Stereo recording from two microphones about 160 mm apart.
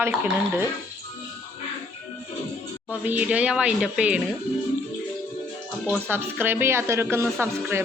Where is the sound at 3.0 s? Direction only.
10° right (ahead or behind).